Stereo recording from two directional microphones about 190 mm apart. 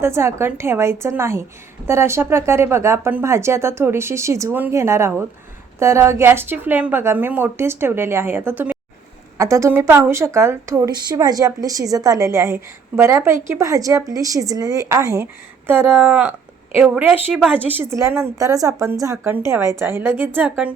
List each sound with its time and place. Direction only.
0.0 s a woman's voice: 15° right (ahead or behind)